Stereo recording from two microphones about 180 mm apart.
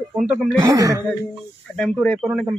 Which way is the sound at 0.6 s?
20° right (ahead or behind).